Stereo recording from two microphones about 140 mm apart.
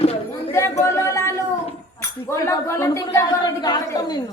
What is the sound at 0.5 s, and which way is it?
Chatter, 20° left (ahead or behind).